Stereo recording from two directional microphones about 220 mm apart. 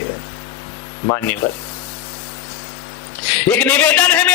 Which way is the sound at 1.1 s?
10° left (ahead or behind).